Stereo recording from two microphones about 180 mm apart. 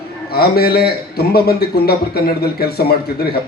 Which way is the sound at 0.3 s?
60° left (ahead or behind).